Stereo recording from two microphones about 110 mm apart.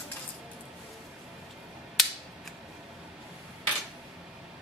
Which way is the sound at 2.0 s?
Centre (ahead or behind).